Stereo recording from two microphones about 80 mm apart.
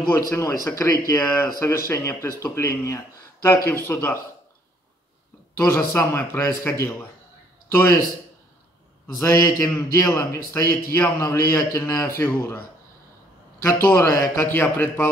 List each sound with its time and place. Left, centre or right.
0.2 s a man's voice: left
5.6 s speech: left
5.9 s a man's voice: left
9.2 s a man's voice: left
12.2 s speech: left
13.6 s a man's voice: left